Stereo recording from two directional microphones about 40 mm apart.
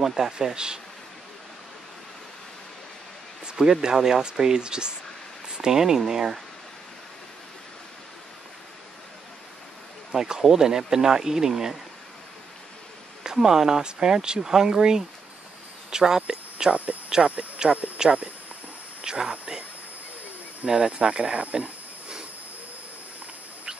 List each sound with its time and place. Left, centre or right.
0.0 s speech: centre
3.5 s speech: centre
10.1 s speech: centre
13.2 s speech: centre
17.2 s speech: centre
17.6 s speech: centre
20.6 s speech: right